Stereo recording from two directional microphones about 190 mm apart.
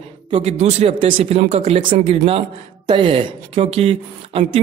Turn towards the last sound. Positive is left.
turn(degrees=-30)  # may be behind; listen again after turning